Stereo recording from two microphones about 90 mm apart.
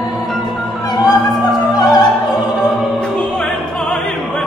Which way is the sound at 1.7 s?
45° left (ahead or behind).